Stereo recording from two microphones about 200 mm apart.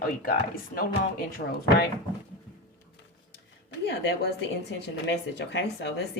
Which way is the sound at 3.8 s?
60° left (ahead or behind).